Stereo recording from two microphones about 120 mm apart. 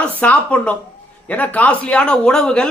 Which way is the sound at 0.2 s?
10° left (ahead or behind).